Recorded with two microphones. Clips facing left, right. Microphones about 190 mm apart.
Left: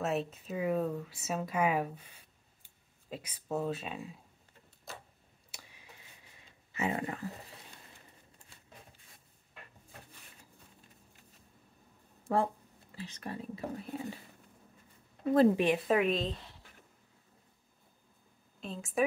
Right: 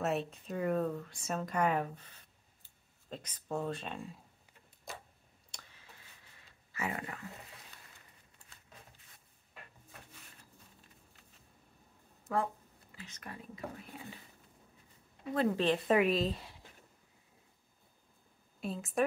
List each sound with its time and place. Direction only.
0.0 s speech: centre (ahead or behind)
4.9 s a sound: 15° right (ahead or behind)
5.5 s a sound: 10° left (ahead or behind)
6.7 s speech: 25° left (ahead or behind)
12.3 s speech: 30° left (ahead or behind)
13.8 s speech: 40° left (ahead or behind)
15.5 s speech: 15° left (ahead or behind)
15.9 s a woman's voice: 5° right (ahead or behind)
18.6 s a woman's voice: 5° right (ahead or behind)